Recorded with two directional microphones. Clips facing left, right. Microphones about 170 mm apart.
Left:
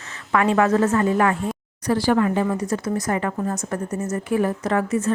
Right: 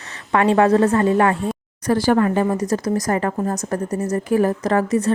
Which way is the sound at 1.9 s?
45° right (ahead or behind).